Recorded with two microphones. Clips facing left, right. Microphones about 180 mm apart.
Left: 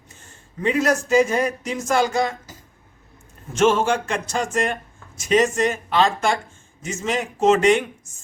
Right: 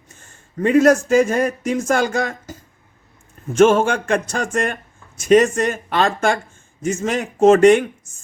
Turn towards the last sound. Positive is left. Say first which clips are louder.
# right 6 dB
turn(degrees=-50)  # may be behind; listen again after turning